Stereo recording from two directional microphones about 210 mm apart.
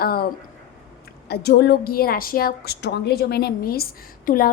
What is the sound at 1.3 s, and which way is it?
A woman's voice, 50° left (ahead or behind).